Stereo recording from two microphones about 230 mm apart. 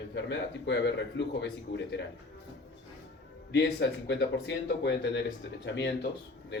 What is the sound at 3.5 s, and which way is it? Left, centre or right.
A man's voice, left.